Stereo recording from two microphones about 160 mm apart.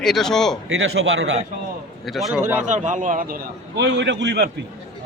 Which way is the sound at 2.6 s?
50° right (ahead or behind).